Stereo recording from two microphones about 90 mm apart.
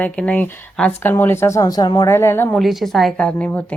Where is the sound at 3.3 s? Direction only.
15° left (ahead or behind).